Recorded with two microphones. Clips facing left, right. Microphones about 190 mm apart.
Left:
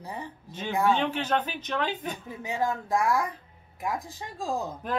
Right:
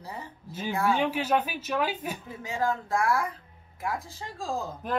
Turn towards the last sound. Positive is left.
turn(degrees=0)  # may be behind; listen again after turning